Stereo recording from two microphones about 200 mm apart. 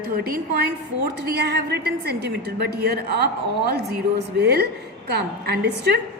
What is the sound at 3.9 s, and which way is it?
Speech, 55° right (ahead or behind).